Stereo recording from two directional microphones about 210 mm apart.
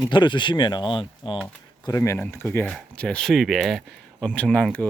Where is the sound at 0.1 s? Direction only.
20° left (ahead or behind).